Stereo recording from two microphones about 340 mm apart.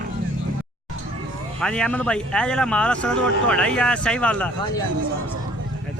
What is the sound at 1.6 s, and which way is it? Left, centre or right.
A man's voice, centre.